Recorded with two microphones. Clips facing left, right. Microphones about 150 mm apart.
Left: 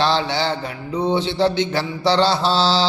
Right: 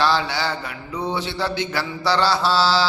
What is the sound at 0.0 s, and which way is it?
Mantra, 25° left (ahead or behind).